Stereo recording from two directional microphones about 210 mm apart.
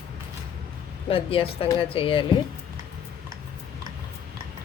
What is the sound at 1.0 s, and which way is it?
Speech, 25° left (ahead or behind).